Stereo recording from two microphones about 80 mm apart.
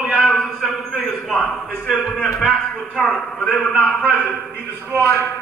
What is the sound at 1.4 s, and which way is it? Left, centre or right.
Speech, centre.